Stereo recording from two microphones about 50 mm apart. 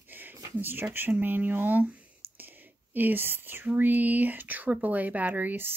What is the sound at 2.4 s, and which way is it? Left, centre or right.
Whispering, right.